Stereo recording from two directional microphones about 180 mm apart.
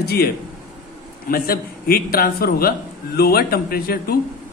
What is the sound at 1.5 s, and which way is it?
A man's voice, 55° left (ahead or behind).